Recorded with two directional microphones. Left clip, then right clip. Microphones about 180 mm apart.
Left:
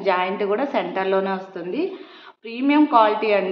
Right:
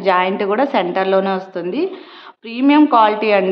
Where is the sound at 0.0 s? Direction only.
60° right (ahead or behind).